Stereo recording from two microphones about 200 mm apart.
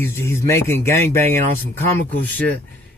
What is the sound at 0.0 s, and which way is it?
Speech, 10° left (ahead or behind).